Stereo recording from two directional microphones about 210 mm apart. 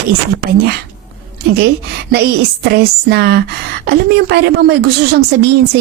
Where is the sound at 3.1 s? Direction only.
50° right (ahead or behind).